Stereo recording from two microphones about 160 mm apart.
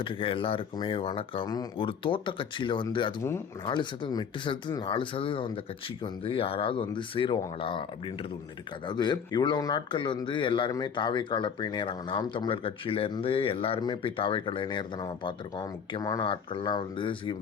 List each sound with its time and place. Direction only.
0.0 s speech: 35° left (ahead or behind)
8.9 s speech: 25° left (ahead or behind)